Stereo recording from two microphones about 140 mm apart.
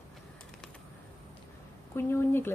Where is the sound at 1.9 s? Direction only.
15° left (ahead or behind).